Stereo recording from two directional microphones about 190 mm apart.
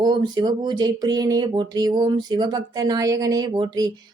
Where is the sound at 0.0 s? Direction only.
25° right (ahead or behind).